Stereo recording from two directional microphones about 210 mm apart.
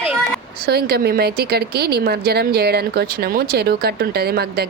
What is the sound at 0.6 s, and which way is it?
Speech, 50° right (ahead or behind).